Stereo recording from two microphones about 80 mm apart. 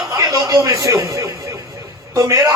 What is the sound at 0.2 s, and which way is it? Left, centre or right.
A man's voice, right.